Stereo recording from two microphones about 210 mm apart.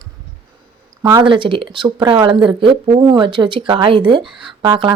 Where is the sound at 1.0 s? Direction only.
20° right (ahead or behind).